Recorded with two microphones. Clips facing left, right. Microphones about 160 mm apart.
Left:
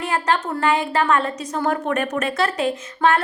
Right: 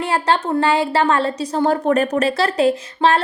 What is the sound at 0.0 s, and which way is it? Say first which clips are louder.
A woman's voice: right 3 dB; 30° right (ahead or behind).